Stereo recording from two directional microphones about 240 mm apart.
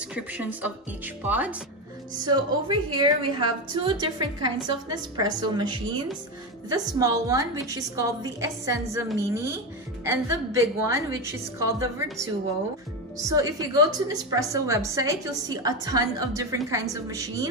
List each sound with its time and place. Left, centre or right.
0.1 s a woman's voice: centre
2.1 s a woman's voice: centre
13.3 s a woman's voice: centre